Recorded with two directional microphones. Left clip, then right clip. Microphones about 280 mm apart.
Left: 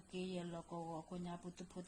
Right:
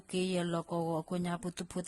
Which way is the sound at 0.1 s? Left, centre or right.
Right.